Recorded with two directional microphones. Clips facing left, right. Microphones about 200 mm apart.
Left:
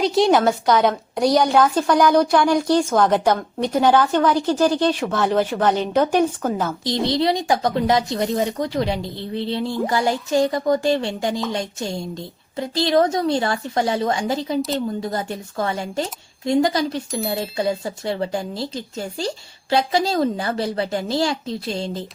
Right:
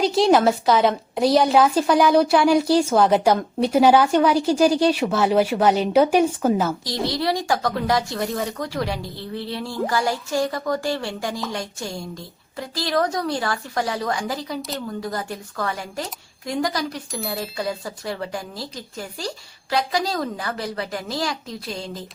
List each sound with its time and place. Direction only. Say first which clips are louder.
0.0 s a woman's voice: even; centre (ahead or behind)
6.8 s speech: left 4 dB; 25° left (ahead or behind)